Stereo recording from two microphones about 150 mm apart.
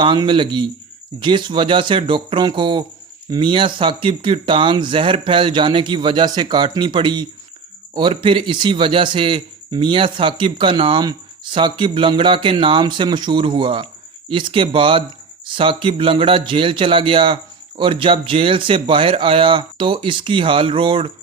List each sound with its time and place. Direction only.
0.0 s a man's voice: 30° right (ahead or behind)